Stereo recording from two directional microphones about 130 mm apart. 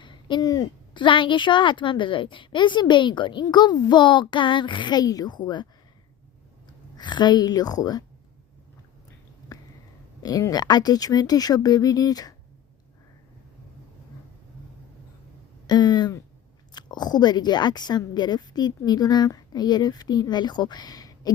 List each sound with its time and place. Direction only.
0.0 s a woman's voice: 35° left (ahead or behind)
6.9 s a woman's voice: 35° left (ahead or behind)
9.5 s a sound: 30° left (ahead or behind)
10.2 s a woman's voice: 30° left (ahead or behind)
15.6 s a woman's voice: 35° left (ahead or behind)